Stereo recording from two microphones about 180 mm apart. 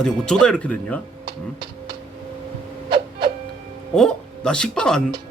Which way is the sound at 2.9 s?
25° right (ahead or behind).